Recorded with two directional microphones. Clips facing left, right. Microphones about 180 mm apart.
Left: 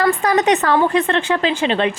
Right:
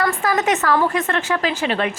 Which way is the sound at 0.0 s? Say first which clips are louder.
Left 4 dB; 35° left (ahead or behind).